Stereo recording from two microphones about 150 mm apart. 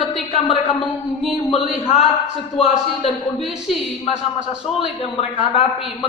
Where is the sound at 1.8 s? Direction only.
45° left (ahead or behind).